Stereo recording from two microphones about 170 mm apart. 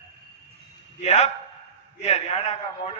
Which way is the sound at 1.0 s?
40° left (ahead or behind).